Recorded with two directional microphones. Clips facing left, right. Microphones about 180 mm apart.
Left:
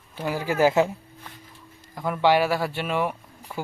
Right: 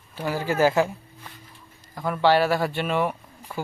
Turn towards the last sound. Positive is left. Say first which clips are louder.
# right 1 dB
turn(degrees=10)  # may be behind; listen again after turning